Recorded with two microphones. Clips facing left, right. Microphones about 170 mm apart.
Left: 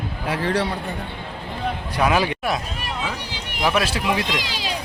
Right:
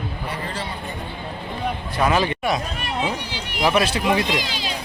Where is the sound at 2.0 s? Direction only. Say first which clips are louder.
Even; 10° left (ahead or behind).